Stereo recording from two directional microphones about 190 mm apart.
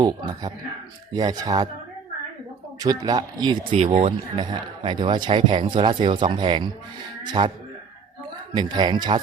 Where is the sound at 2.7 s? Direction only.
20° right (ahead or behind).